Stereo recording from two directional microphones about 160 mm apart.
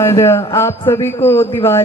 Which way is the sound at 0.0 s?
15° left (ahead or behind).